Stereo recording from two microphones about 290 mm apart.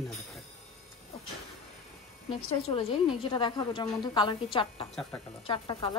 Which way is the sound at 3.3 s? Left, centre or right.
Centre.